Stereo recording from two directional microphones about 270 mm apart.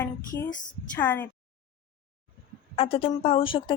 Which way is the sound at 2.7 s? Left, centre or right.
Left.